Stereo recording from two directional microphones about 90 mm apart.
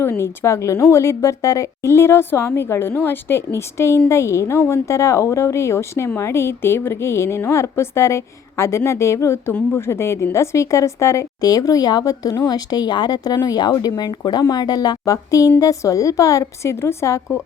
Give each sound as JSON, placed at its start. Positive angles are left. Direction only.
{"t": 0.0, "sound": "a woman's voice", "side_deg": 30}